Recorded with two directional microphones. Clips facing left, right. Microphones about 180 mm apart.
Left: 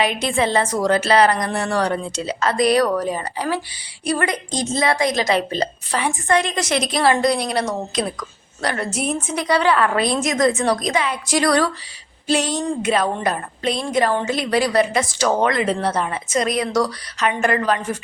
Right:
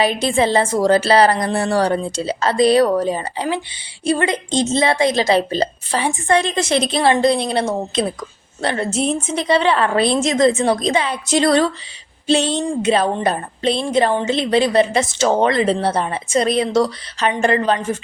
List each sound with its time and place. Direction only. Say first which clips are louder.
0.0 s a woman's voice: right 3 dB; 30° right (ahead or behind)